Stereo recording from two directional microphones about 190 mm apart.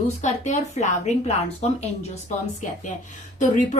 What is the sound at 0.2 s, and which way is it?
A woman's voice, 40° left (ahead or behind).